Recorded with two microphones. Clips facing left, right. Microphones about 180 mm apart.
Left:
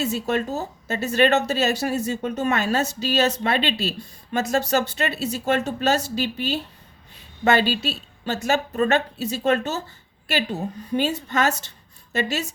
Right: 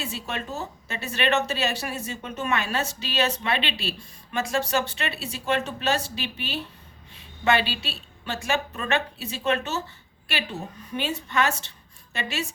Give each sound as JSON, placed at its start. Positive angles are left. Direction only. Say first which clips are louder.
{"t": 0.0, "sound": "a woman's voice", "louder": "left 9 dB", "side_deg": 40}
{"t": 10.9, "sound": "a woman's voice", "louder": "left 4 dB", "side_deg": 40}